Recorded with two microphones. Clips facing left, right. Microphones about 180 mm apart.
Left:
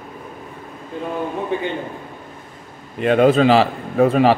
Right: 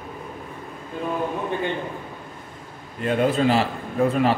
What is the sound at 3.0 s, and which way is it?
A man's voice, 85° left.